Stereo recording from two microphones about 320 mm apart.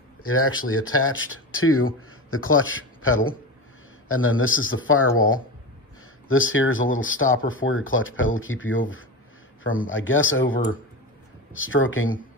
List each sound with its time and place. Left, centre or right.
0.2 s speech: left
9.8 s speech: left